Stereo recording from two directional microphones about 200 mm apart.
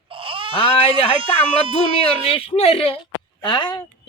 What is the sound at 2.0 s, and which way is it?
Speech, 30° left (ahead or behind).